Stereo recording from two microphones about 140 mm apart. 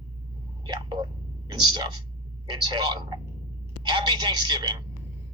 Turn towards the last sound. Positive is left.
turn(degrees=-30)  # may be behind; listen again after turning